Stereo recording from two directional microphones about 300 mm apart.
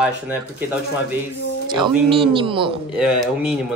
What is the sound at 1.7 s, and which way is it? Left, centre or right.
A woman's voice, centre.